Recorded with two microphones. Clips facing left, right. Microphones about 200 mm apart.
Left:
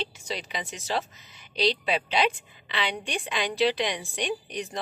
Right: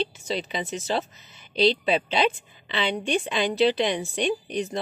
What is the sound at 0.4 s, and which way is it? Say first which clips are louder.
Speech: right 6 dB; 25° right (ahead or behind).